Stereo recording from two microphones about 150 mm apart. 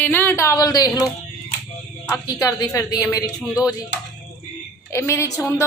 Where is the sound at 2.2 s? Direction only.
25° left (ahead or behind).